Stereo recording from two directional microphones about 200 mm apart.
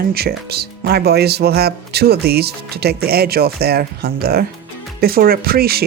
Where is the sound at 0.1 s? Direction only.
50° right (ahead or behind).